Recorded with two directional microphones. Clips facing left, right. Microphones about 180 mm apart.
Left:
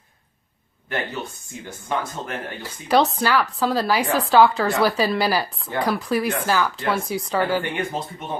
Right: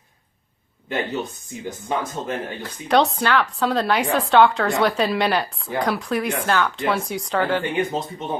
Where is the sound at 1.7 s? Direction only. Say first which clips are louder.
Right 1 dB; 15° right (ahead or behind).